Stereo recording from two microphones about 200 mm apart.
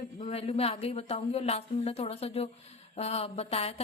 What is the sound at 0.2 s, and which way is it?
A woman's voice, 30° left (ahead or behind).